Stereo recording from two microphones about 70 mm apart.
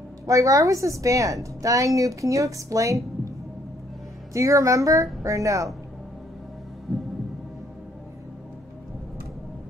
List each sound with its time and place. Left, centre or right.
0.3 s a woman's voice: right
4.3 s a woman's voice: right
6.9 s heart sounds: centre